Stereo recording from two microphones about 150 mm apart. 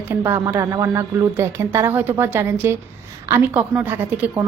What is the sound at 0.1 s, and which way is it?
A woman's voice, 15° right (ahead or behind).